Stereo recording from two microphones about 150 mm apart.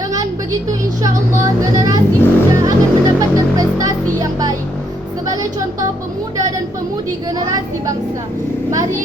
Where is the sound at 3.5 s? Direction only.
25° right (ahead or behind).